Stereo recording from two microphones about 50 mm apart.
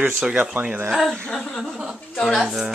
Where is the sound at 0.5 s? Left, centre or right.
Right.